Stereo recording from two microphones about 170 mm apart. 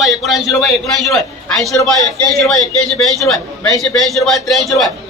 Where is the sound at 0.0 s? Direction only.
Centre (ahead or behind).